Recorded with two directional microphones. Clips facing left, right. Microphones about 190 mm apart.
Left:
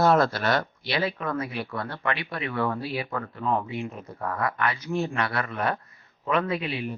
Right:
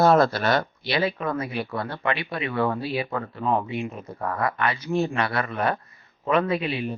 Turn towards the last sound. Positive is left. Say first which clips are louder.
# right 3 dB
turn(degrees=-25)  # may be behind; listen again after turning